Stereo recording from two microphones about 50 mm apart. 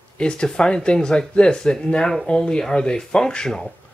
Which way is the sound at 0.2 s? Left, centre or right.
Centre.